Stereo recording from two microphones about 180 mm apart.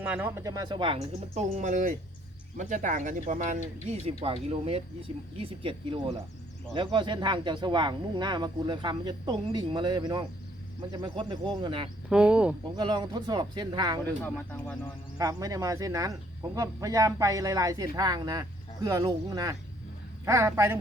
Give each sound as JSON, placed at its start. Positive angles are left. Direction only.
{"t": 0.0, "sound": "speech", "side_deg": -10}
{"t": 4.2, "sound": "speech", "side_deg": -30}
{"t": 12.0, "sound": "speech", "side_deg": -5}
{"t": 12.7, "sound": "speech", "side_deg": -25}
{"t": 14.0, "sound": "speech", "side_deg": 10}
{"t": 15.2, "sound": "a woman's voice", "side_deg": -20}